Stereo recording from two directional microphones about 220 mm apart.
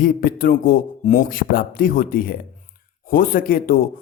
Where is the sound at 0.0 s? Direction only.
40° left (ahead or behind).